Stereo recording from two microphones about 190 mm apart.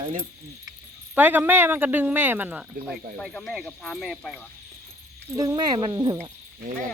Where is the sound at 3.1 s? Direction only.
5° left (ahead or behind).